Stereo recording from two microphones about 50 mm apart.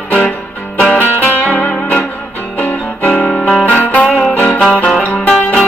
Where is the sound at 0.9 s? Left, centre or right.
Left.